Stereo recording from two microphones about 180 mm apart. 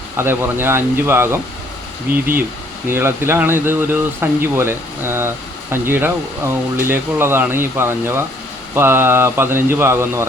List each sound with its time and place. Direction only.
0.2 s speech: 15° right (ahead or behind)
2.1 s speech: 50° right (ahead or behind)
2.8 s speech: 15° right (ahead or behind)